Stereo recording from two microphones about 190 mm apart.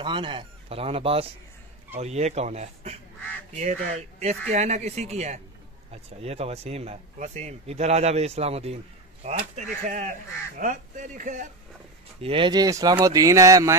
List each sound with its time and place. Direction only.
0.0 s speech: 25° right (ahead or behind); by 11.4 s 40° right (ahead or behind)
12.2 s speech: 25° right (ahead or behind)